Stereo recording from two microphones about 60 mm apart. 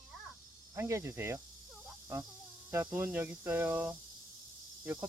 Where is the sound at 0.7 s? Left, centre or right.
Right.